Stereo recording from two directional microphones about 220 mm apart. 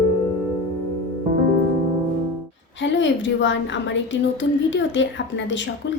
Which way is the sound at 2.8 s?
55° left (ahead or behind).